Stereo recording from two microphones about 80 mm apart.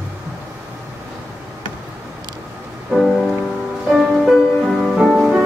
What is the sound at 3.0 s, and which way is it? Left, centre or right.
Music, centre.